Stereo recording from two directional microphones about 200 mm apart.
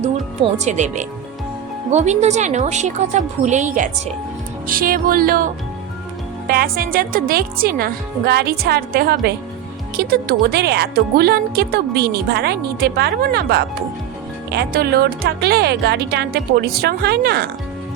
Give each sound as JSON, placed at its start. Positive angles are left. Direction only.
{"t": 0.0, "sound": "a woman's voice", "side_deg": -35}
{"t": 6.5, "sound": "a woman's voice", "side_deg": -45}